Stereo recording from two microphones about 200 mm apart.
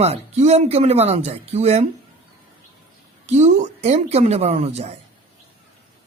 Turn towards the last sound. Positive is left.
turn(degrees=-35)  # may be behind; listen again after turning